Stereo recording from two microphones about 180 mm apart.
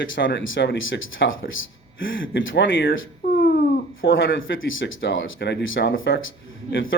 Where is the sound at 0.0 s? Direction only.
80° left.